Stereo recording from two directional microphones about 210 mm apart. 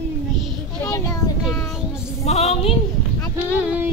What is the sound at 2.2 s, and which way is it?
Speech, 30° left (ahead or behind).